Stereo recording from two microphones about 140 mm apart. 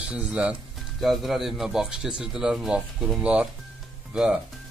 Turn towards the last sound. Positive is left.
turn(degrees=-5)  # may be behind; listen again after turning